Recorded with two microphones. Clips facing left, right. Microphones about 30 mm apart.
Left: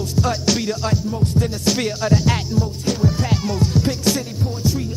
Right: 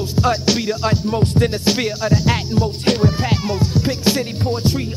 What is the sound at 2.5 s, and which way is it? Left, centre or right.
Music, right.